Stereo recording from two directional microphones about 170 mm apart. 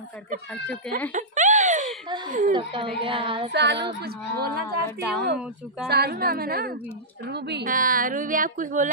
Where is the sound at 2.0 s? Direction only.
25° right (ahead or behind).